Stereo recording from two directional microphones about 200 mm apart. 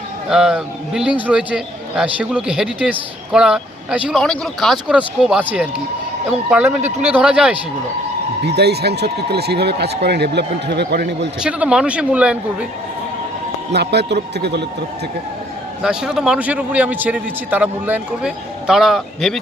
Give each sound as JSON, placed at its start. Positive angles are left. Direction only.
{"t": 0.3, "sound": "a man's voice", "side_deg": -5}
{"t": 8.4, "sound": "speech", "side_deg": -55}
{"t": 11.4, "sound": "a man's voice", "side_deg": -5}
{"t": 13.7, "sound": "speech", "side_deg": -55}
{"t": 15.8, "sound": "a man's voice", "side_deg": -5}